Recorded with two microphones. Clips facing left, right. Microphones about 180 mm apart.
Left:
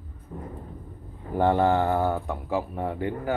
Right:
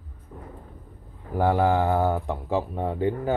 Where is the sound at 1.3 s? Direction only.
10° right (ahead or behind).